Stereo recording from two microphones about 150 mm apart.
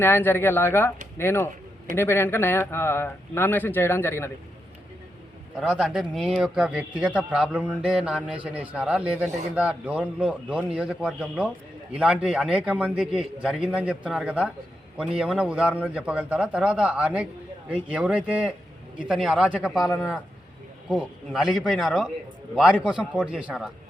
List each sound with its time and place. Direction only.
0.0 s speech: 15° left (ahead or behind)
5.5 s speech: centre (ahead or behind)
20.9 s speech: 5° right (ahead or behind)